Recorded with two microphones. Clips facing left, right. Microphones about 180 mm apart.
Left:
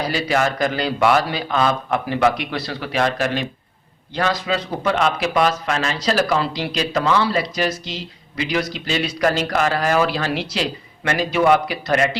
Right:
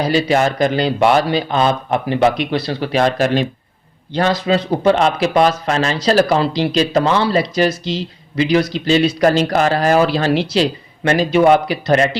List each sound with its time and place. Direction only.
0.0 s speech: 25° right (ahead or behind)